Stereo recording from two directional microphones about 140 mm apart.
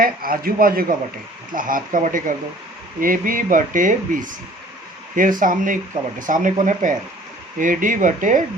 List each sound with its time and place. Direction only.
0.0 s speech: 90° right
1.5 s speech: 80° right
3.0 s speech: 80° right
5.4 s speech: 70° right (ahead or behind)